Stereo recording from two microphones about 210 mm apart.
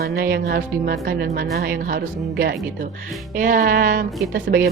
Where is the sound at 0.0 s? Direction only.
45° right (ahead or behind).